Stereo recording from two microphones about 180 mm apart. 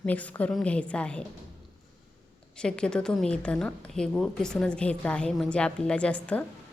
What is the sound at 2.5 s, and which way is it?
A woman's voice, 5° left (ahead or behind).